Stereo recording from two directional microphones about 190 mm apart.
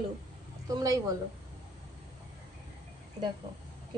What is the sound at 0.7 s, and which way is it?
Speech, 20° right (ahead or behind).